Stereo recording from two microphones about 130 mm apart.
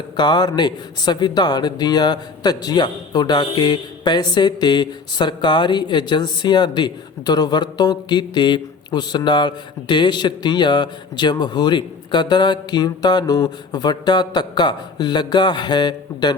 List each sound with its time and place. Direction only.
0.2 s speech: 35° left (ahead or behind)